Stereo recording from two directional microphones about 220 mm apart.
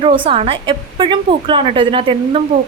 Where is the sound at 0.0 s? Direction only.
25° right (ahead or behind).